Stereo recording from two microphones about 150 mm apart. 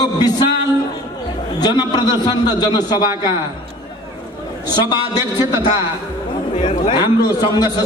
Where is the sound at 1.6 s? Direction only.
30° left (ahead or behind).